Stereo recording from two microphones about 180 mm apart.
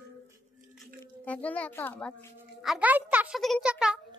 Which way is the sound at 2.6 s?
5° right (ahead or behind).